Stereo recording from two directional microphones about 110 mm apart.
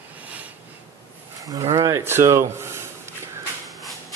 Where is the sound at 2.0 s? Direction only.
20° right (ahead or behind).